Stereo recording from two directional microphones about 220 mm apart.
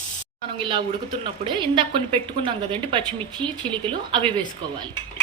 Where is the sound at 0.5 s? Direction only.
25° right (ahead or behind).